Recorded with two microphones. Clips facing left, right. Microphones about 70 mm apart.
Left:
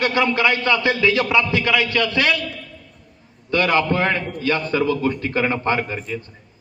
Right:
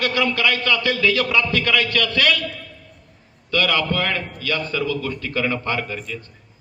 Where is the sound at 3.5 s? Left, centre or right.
Left.